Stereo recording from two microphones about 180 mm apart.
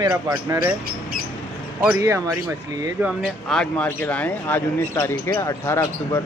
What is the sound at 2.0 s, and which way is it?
Speech, 15° right (ahead or behind).